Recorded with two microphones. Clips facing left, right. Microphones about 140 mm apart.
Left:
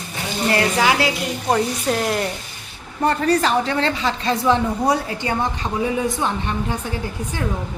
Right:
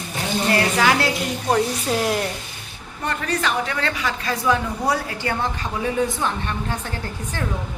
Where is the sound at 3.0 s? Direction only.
35° left (ahead or behind); by 7.4 s 15° left (ahead or behind).